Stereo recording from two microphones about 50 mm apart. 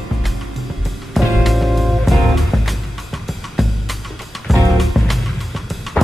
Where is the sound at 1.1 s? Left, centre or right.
Centre.